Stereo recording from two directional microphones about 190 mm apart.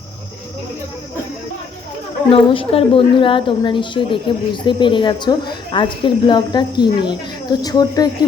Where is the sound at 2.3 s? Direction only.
30° left (ahead or behind).